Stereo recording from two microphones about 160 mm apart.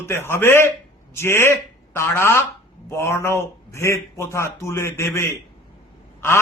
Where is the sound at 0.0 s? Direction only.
15° left (ahead or behind).